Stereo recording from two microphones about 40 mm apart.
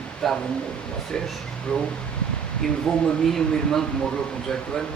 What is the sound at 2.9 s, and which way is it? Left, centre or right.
Speech, centre.